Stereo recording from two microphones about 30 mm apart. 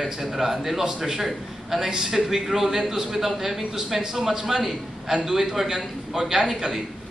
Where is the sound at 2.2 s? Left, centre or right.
Centre.